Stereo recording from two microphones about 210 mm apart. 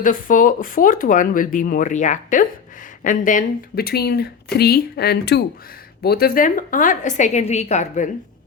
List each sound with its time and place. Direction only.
0.0 s speech: 40° left (ahead or behind)